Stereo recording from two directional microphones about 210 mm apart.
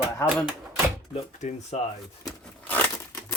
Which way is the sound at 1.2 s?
30° left (ahead or behind).